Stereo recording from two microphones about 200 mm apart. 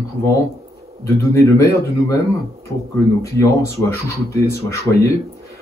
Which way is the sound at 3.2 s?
15° left (ahead or behind).